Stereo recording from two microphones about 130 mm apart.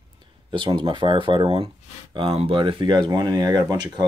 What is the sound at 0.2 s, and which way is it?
Speech, 40° right (ahead or behind).